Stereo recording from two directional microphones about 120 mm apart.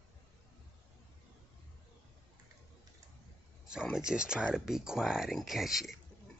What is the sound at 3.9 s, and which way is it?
Speech, 5° right (ahead or behind).